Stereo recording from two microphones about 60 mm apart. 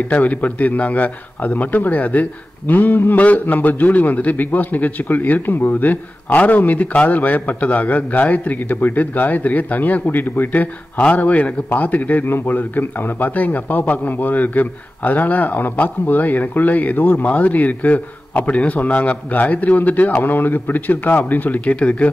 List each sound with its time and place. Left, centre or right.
0.1 s a man's voice: left